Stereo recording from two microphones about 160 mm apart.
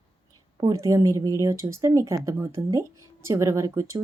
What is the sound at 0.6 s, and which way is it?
A woman's voice, 20° right (ahead or behind).